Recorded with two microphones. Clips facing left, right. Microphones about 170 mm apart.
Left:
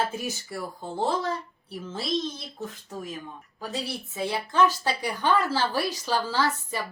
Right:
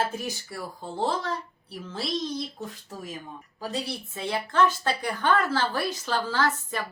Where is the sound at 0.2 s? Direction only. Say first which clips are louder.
Left 1 dB; 5° left (ahead or behind).